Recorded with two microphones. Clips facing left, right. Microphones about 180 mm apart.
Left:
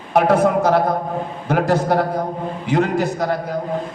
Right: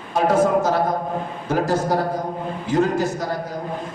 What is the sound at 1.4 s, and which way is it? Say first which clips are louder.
A man's voice: left 3 dB; 65° left (ahead or behind).